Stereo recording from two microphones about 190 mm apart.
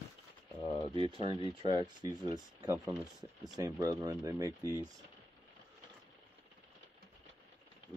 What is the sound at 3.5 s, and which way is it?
Speech, 20° right (ahead or behind).